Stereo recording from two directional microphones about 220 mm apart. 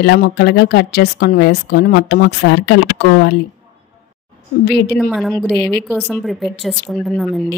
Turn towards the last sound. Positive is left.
turn(degrees=0)  # may be behind; listen again after turning